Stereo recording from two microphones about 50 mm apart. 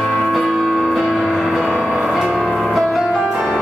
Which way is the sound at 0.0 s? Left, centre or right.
Left.